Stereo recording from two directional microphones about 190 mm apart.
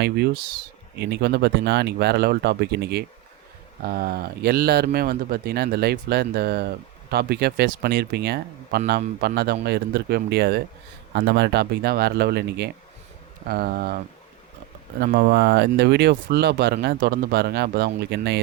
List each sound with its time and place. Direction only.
0.9 s speech: 60° right (ahead or behind)